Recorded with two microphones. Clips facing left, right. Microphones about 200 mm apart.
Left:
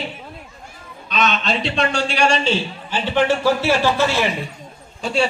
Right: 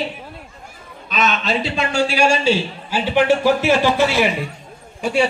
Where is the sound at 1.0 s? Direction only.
5° right (ahead or behind).